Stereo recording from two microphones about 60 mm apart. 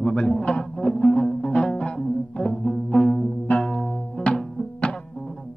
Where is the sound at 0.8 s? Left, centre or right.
Centre.